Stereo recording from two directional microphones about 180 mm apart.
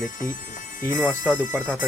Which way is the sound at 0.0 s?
45° left (ahead or behind).